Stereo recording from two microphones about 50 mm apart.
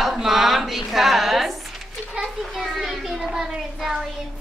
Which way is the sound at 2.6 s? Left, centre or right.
Centre.